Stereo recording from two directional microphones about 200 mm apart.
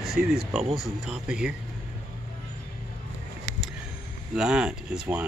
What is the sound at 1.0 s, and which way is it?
Speech, 5° right (ahead or behind).